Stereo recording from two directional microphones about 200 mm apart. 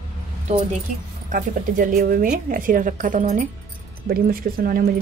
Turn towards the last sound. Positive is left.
turn(degrees=-45)  # may be behind; listen again after turning